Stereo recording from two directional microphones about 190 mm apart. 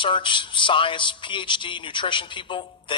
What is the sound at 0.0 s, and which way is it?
A man's voice, 25° left (ahead or behind).